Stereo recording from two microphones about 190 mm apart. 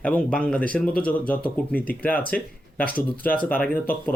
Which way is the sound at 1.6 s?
50° left (ahead or behind).